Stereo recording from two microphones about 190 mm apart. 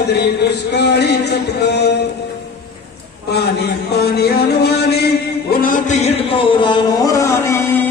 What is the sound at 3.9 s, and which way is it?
Music, 55° left (ahead or behind).